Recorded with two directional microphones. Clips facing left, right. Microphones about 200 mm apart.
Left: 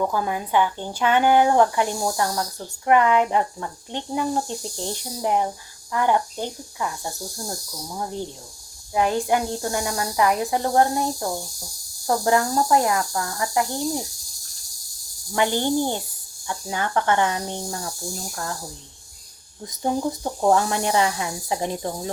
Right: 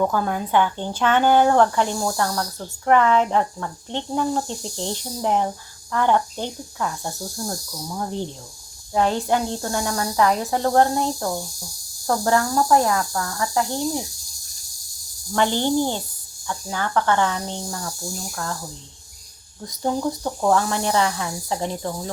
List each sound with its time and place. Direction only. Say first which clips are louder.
0.1 s speech: right 2 dB; 10° left (ahead or behind)
8.9 s speech: right 1 dB; 15° left (ahead or behind)
15.4 s speech: right 1 dB; 10° left (ahead or behind)
19.6 s speech: right 1 dB; 20° left (ahead or behind)